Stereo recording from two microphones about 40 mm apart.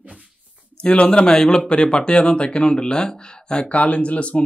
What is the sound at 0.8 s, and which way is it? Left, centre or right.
Speech, left.